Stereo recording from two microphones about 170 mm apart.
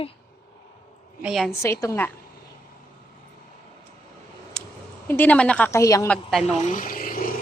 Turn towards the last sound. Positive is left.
turn(degrees=55)  # may be behind; listen again after turning